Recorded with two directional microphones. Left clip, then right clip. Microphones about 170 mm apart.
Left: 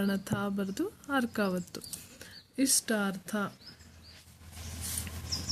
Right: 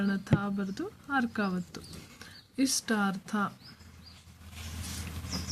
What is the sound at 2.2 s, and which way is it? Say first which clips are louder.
Speech: even; 20° left (ahead or behind).